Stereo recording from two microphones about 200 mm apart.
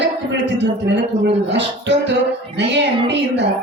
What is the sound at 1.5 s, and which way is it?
Speech, 60° right (ahead or behind).